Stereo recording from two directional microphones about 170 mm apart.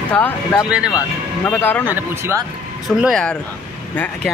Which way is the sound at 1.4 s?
15° left (ahead or behind).